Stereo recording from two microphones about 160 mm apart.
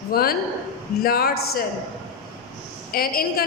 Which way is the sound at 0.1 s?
70° left (ahead or behind).